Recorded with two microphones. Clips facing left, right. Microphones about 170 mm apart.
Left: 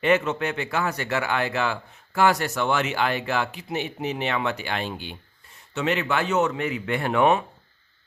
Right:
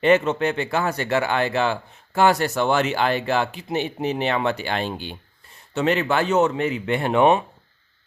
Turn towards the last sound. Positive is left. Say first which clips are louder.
# right 3 dB
turn(degrees=-25)  # may be behind; listen again after turning